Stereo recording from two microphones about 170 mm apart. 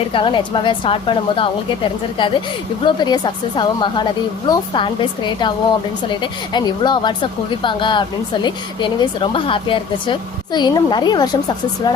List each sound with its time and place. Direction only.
0.1 s speech: 30° left (ahead or behind)